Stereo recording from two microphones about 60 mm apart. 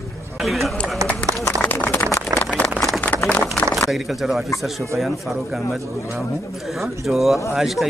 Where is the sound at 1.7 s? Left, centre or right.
Left.